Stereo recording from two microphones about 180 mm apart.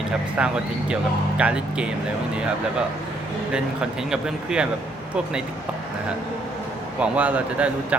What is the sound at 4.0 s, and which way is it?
Speech, 5° right (ahead or behind).